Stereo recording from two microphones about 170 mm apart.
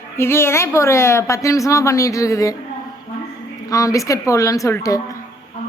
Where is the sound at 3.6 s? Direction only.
20° left (ahead or behind).